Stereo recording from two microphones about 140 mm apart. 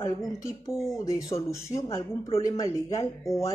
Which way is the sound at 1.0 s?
25° left (ahead or behind).